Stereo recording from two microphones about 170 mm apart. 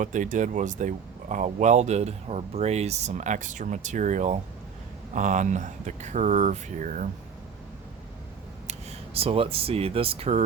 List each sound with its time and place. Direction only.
0.0 s speech: 50° right (ahead or behind)
9.1 s speech: 35° right (ahead or behind)